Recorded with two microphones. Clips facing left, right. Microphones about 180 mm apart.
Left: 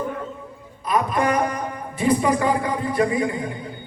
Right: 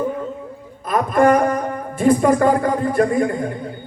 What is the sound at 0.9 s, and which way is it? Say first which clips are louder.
A man's voice: right 6 dB; 50° right (ahead or behind).